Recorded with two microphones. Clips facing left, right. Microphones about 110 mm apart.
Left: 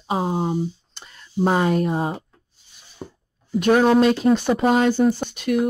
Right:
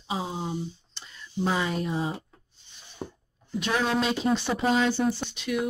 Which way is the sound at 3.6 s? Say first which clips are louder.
Left 11 dB; 50° left (ahead or behind).